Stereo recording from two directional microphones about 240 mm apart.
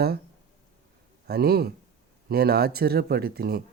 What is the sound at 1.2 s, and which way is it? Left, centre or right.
Speech, right.